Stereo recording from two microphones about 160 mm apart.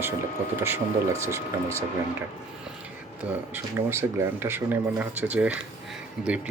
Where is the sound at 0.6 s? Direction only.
15° right (ahead or behind).